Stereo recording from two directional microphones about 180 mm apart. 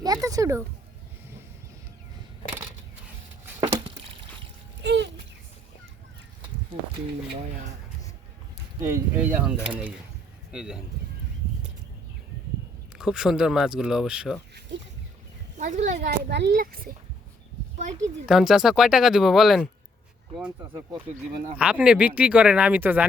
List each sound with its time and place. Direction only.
0.0 s a sound: 20° right (ahead or behind)
3.6 s a sound: 30° right (ahead or behind)
4.8 s a sound: 75° right (ahead or behind)
8.8 s speech: 15° right (ahead or behind)
13.0 s speech: 5° right (ahead or behind)
15.5 s speech: 45° right (ahead or behind)
16.0 s a child's voice: 70° right (ahead or behind)
18.3 s speech: centre (ahead or behind)
20.4 s speech: 15° right (ahead or behind)